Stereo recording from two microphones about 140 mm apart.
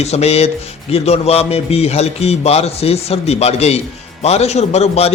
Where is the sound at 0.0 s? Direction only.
50° left (ahead or behind).